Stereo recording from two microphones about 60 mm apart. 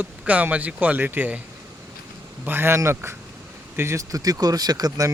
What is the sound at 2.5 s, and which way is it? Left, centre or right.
Speech, right.